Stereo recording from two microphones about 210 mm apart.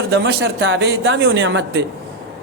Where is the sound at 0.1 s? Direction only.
50° right (ahead or behind).